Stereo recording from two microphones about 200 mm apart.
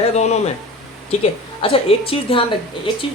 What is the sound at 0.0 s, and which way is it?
Speech, 35° left (ahead or behind).